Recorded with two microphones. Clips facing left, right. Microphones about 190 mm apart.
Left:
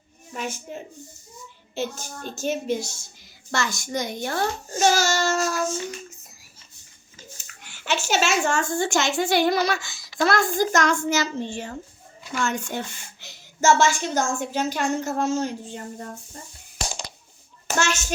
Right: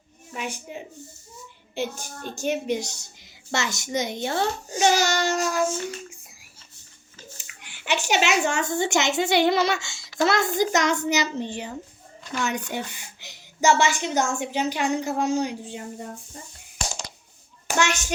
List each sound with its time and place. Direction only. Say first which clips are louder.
0.3 s a woman's voice: left 1 dB; 15° right (ahead or behind)
4.9 s baby cry: even; 15° right (ahead or behind)
5.4 s speech: right 1 dB; 15° right (ahead or behind)
7.5 s a sound: left 1 dB; 10° right (ahead or behind)
7.9 s a woman's voice: even; 15° right (ahead or behind)
17.7 s a child's voice: right 1 dB; 15° right (ahead or behind)